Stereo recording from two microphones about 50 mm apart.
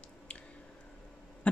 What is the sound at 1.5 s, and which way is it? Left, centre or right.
Insect, left.